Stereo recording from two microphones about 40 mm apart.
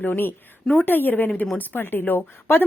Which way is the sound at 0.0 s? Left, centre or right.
Left.